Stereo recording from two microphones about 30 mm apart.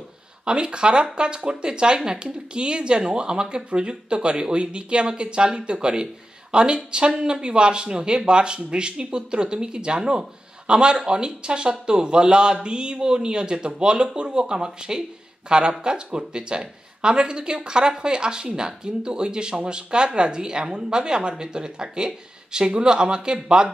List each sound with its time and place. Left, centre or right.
0.5 s speech: right